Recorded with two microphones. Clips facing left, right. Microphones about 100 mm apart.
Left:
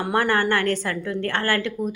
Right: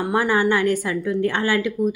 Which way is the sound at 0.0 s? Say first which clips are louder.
Right 2 dB; 5° right (ahead or behind).